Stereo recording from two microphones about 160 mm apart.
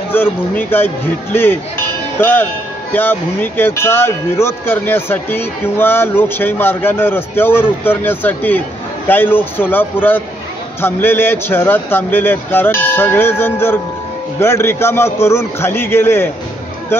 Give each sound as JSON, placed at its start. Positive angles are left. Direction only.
{"t": 0.1, "sound": "speech", "side_deg": 15}